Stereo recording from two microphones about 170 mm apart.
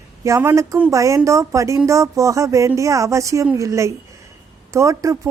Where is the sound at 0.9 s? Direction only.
20° right (ahead or behind).